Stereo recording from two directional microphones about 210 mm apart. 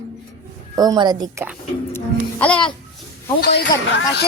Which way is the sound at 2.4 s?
5° left (ahead or behind).